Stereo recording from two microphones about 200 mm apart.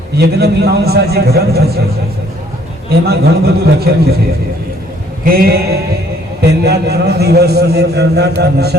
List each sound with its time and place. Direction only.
0.2 s a man's voice: 50° right (ahead or behind)
3.1 s a man's voice: 50° right (ahead or behind)
5.2 s a man's voice: 50° right (ahead or behind)